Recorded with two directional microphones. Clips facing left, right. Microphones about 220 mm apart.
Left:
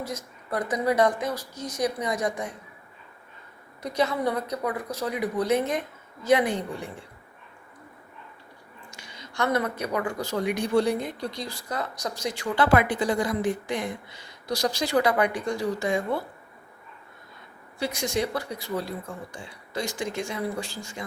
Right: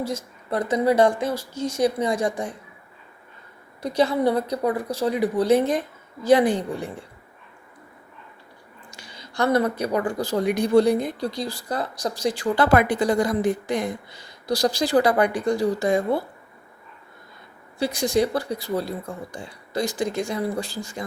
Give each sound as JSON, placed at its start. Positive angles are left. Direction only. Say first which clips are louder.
{"t": 0.0, "sound": "a woman's voice", "louder": "right 6 dB", "side_deg": -30}
{"t": 3.8, "sound": "a woman's voice", "louder": "right 5 dB", "side_deg": -30}
{"t": 8.9, "sound": "a woman's voice", "louder": "right 2 dB", "side_deg": -35}
{"t": 17.7, "sound": "a woman's voice", "louder": "right 6 dB", "side_deg": -35}